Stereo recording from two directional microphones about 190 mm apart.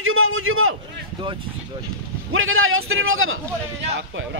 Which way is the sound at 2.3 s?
90° right.